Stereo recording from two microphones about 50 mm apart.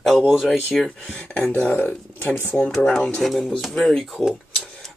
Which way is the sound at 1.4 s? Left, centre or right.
Left.